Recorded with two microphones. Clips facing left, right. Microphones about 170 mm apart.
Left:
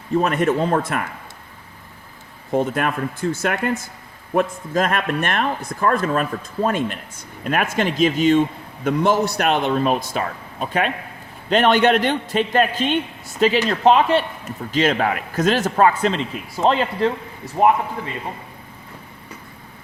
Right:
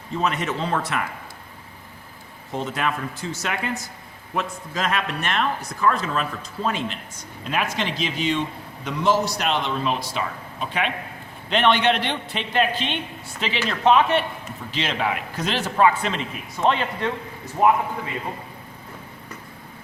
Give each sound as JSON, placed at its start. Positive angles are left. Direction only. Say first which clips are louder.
{"t": 0.2, "sound": "a man's voice", "louder": "left 6 dB", "side_deg": 50}
{"t": 2.6, "sound": "a man's voice", "louder": "left 5 dB", "side_deg": 50}